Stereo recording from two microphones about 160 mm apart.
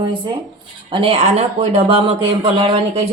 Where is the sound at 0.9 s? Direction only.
35° right (ahead or behind).